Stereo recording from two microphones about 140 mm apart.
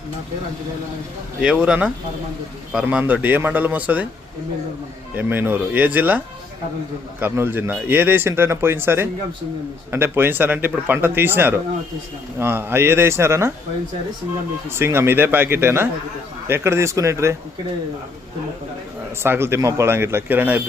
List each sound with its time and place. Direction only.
1.4 s a man's voice: 5° right (ahead or behind)
5.1 s a man's voice: 15° right (ahead or behind)
14.7 s a man's voice: 15° right (ahead or behind)
19.2 s a man's voice: 15° right (ahead or behind)